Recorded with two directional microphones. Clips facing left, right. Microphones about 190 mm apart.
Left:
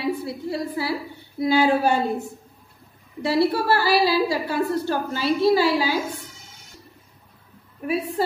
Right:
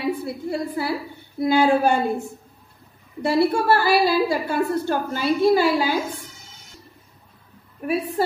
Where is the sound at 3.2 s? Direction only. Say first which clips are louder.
Right 1 dB; 50° right (ahead or behind).